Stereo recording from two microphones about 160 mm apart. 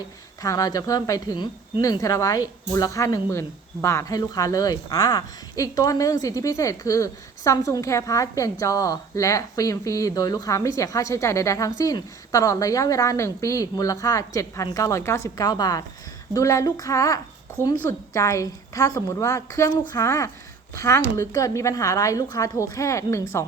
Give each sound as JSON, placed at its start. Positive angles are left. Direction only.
{"t": 0.4, "sound": "speech", "side_deg": 20}